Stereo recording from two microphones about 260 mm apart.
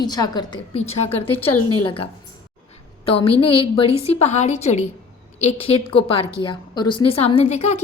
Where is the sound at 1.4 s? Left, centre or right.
Left.